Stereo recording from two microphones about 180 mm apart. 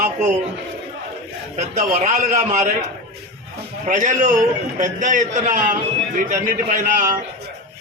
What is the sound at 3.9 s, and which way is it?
A man's voice, 45° right (ahead or behind).